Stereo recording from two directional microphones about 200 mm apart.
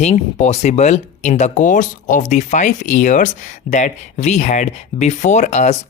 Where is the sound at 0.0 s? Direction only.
35° left (ahead or behind).